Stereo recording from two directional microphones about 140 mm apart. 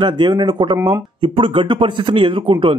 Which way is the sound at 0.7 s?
15° right (ahead or behind).